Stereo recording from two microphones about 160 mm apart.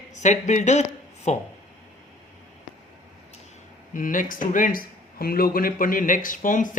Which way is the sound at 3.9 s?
55° left (ahead or behind).